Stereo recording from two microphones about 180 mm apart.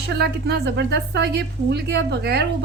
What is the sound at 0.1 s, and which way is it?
A woman's voice, 65° right (ahead or behind).